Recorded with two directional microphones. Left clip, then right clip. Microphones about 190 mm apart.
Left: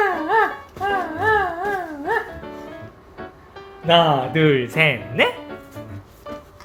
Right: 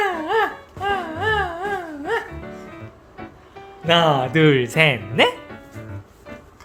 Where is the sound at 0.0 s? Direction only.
30° right (ahead or behind).